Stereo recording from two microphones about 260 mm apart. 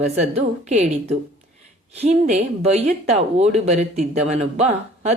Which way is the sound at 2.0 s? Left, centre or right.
Right.